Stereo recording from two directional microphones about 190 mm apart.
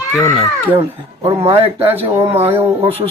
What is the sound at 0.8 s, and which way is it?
Speech, 25° right (ahead or behind).